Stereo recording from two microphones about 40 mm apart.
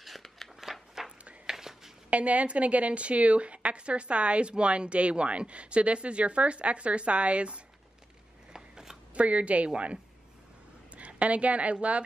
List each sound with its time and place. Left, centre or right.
0.0 s scissors: centre
1.0 s a sound: centre
2.0 s speech: right
8.5 s a sound: centre
9.1 s speech: right
11.0 s a woman's voice: right